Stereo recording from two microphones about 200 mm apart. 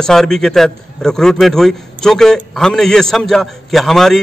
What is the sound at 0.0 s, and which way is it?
A man's voice, 5° left (ahead or behind).